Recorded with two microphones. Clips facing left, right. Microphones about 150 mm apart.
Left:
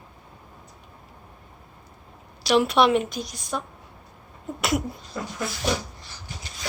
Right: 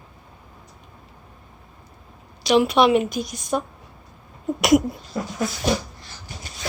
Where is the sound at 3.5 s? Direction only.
20° right (ahead or behind).